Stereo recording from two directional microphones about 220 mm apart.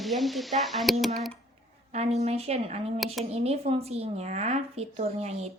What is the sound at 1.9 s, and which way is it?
A woman's voice, 30° right (ahead or behind).